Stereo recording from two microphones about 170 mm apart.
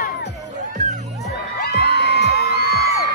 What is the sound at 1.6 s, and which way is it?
Music, 80° left.